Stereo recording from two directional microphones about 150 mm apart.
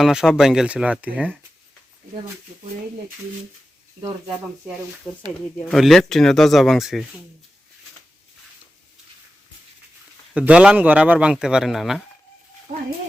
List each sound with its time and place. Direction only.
0.0 s speech: 5° right (ahead or behind)
5.1 s speech: 5° left (ahead or behind)
10.3 s a man's voice: 10° right (ahead or behind)